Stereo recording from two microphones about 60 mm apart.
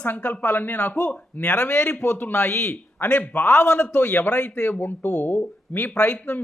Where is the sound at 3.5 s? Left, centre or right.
Left.